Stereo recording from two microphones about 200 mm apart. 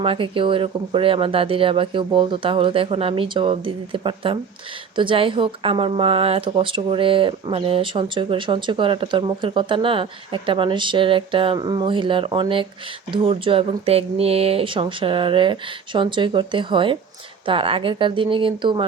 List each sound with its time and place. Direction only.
0.0 s speech: 25° right (ahead or behind)